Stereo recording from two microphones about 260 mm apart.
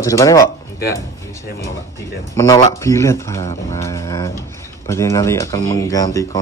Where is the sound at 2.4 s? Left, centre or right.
Centre.